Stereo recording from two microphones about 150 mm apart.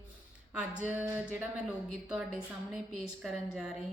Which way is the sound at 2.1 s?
5° right (ahead or behind).